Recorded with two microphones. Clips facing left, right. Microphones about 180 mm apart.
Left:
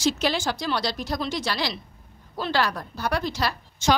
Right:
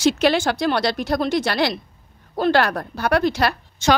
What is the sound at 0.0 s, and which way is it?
A woman's voice, 65° right (ahead or behind).